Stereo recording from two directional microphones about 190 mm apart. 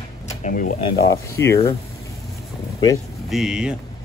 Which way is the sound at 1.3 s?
15° left (ahead or behind).